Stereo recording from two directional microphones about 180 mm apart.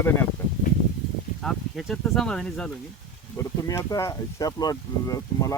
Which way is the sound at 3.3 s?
15° left (ahead or behind).